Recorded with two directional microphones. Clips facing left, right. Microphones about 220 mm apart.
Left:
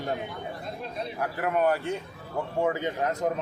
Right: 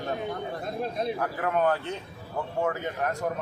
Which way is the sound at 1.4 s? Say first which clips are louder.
Left 2 dB; 10° left (ahead or behind).